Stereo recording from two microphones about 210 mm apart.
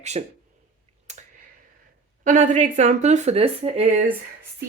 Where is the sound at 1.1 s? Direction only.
35° right (ahead or behind).